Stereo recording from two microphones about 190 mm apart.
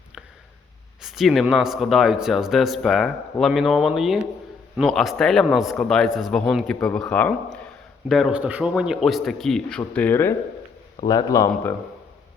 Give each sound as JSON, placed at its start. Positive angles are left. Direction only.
{"t": 1.0, "sound": "a man's voice", "side_deg": 0}